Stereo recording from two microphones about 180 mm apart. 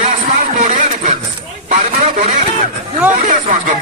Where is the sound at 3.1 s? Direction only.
45° right (ahead or behind).